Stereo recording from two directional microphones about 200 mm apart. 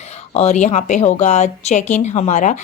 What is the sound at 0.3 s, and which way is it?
Speech, 35° left (ahead or behind).